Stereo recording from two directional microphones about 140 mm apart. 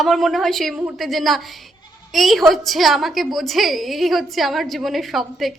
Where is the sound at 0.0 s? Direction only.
Centre (ahead or behind).